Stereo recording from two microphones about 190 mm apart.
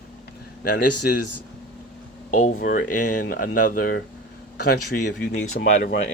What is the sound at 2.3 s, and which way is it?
Speech, 40° left (ahead or behind).